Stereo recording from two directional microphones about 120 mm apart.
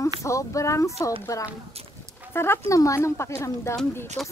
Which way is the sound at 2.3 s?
25° left (ahead or behind).